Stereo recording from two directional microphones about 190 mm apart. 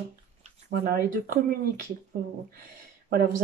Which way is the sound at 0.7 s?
50° right (ahead or behind).